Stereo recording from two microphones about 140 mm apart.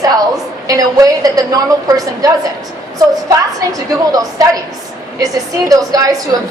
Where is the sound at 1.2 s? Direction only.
25° right (ahead or behind).